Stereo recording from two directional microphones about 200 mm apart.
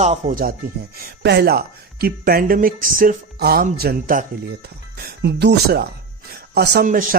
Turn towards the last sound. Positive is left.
turn(degrees=-55)  # may be behind; listen again after turning